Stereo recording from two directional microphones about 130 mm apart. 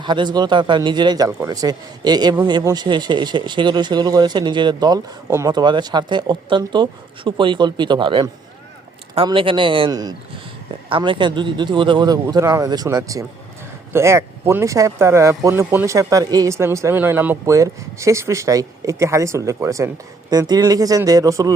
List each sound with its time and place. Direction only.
0.0 s speech: 35° right (ahead or behind)
10.7 s speech: 40° right (ahead or behind); by 21.5 s 25° right (ahead or behind)